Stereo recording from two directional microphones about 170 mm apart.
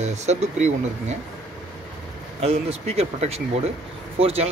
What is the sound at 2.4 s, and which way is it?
Speech, 35° right (ahead or behind).